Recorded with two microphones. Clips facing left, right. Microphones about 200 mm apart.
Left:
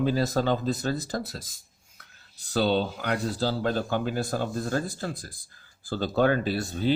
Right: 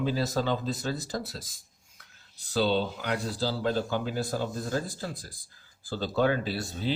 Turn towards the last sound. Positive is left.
turn(degrees=50)  # may be behind; listen again after turning